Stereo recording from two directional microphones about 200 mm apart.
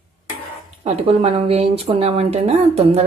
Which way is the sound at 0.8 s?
30° right (ahead or behind).